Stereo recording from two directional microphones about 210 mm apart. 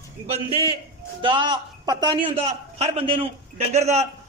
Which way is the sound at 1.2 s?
20° right (ahead or behind).